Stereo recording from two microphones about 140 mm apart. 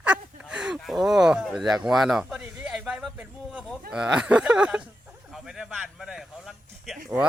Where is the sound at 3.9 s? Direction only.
5° right (ahead or behind).